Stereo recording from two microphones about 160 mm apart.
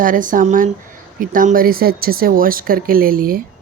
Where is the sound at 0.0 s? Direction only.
55° right (ahead or behind).